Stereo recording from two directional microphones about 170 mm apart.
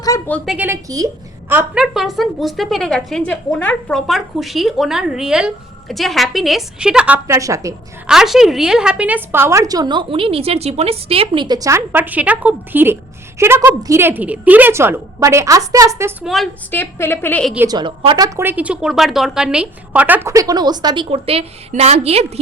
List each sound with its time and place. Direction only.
0.3 s a woman's voice: 5° left (ahead or behind)
0.5 s a woman's voice: 10° right (ahead or behind)
0.9 s a woman's voice: 20° right (ahead or behind)
1.8 s a woman's voice: centre (ahead or behind)
7.3 s speech: 20° right (ahead or behind)
8.0 s a woman's voice: 5° right (ahead or behind)
16.2 s a woman's voice: centre (ahead or behind)
16.7 s a woman's voice: 10° left (ahead or behind)
17.7 s speech: 25° right (ahead or behind)